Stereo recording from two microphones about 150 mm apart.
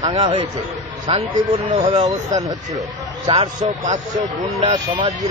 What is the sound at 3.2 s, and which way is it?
Speech, 45° right (ahead or behind).